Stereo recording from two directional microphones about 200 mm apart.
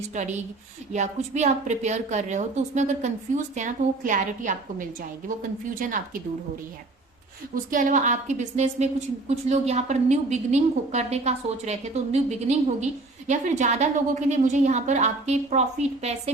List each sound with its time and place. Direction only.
0.1 s a woman's voice: 35° right (ahead or behind)
7.5 s a woman's voice: 40° right (ahead or behind)